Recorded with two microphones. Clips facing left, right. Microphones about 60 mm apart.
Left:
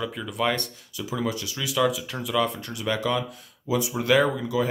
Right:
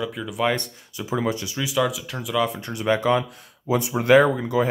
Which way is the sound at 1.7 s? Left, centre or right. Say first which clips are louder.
Even; centre.